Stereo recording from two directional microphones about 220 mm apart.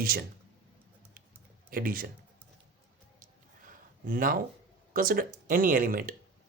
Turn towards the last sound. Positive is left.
turn(degrees=-40)  # may be behind; listen again after turning